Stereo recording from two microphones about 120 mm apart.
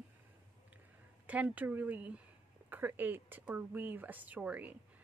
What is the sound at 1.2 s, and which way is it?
A woman's voice, 10° right (ahead or behind).